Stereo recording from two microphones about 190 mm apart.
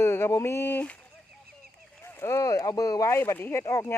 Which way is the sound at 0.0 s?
15° left (ahead or behind).